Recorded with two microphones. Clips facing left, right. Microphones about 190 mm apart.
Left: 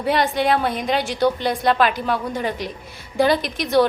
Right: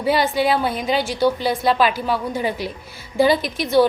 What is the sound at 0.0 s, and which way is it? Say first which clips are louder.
A woman's voice: right 1 dB; 5° right (ahead or behind).